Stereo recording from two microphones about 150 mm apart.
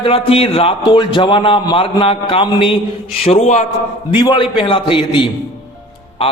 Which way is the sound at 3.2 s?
45° left (ahead or behind).